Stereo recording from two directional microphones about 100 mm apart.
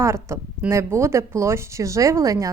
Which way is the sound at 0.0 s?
30° right (ahead or behind).